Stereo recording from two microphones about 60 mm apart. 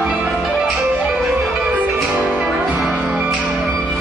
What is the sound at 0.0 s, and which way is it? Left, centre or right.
Music, centre.